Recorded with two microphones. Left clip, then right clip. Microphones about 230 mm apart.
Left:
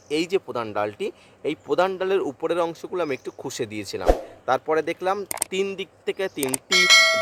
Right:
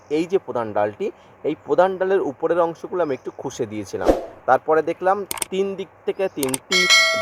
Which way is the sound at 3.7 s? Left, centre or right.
Left.